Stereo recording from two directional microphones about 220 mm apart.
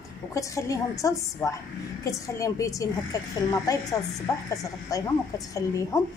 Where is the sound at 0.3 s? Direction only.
15° left (ahead or behind).